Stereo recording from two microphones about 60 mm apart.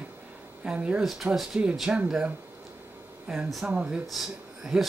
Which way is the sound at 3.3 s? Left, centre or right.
Centre.